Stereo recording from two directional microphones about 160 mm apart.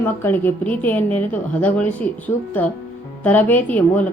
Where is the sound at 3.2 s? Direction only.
10° left (ahead or behind).